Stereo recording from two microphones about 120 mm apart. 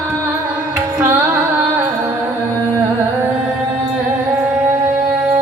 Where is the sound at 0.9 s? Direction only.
20° right (ahead or behind).